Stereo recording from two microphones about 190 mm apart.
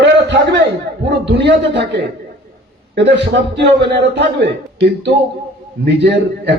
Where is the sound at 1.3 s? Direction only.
65° right (ahead or behind).